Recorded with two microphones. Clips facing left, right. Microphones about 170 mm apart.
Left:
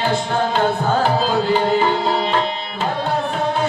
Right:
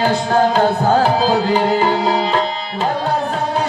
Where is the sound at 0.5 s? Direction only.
40° right (ahead or behind).